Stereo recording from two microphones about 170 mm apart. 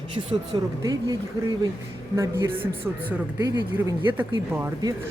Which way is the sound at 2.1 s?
15° right (ahead or behind).